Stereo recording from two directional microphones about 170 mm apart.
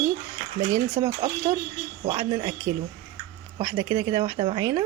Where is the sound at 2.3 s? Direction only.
25° right (ahead or behind).